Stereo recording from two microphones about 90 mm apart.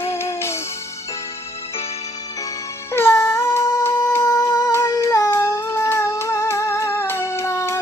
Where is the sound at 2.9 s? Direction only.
25° left (ahead or behind).